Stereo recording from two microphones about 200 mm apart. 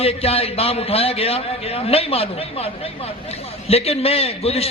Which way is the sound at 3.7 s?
30° left (ahead or behind).